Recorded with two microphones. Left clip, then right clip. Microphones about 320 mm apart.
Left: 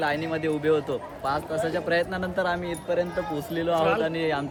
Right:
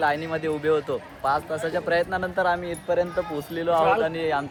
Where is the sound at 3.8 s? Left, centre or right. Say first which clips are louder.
Right 4 dB; centre.